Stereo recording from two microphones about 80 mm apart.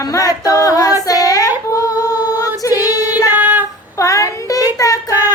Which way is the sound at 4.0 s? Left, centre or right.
Left.